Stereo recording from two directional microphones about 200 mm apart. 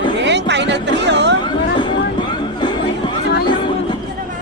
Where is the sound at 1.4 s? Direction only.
25° left (ahead or behind).